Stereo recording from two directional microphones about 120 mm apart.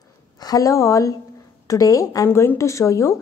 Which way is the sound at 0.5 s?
30° left (ahead or behind).